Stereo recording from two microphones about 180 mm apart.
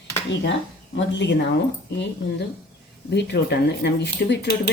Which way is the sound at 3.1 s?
70° left (ahead or behind).